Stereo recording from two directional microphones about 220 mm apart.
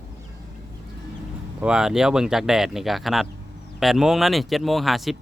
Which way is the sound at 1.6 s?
5° right (ahead or behind).